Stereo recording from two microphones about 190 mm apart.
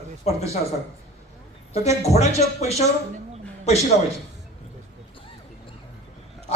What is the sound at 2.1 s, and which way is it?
Speech, 35° left (ahead or behind).